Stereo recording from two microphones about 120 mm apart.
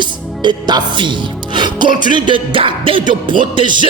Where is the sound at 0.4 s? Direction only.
40° right (ahead or behind).